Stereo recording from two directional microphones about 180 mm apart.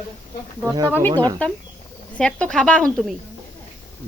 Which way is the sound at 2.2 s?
5° left (ahead or behind).